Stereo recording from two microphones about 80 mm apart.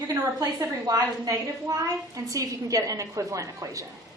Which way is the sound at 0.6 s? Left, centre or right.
Right.